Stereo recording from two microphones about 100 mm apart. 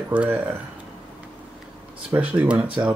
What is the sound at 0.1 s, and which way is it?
Speech, 15° right (ahead or behind).